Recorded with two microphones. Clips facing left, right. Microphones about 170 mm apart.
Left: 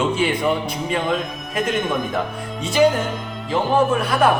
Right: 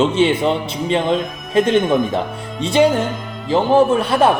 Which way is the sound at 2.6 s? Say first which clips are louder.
Right 2 dB; 30° right (ahead or behind).